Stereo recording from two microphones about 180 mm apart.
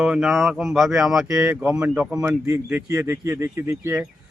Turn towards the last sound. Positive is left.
turn(degrees=-10)  # may be behind; listen again after turning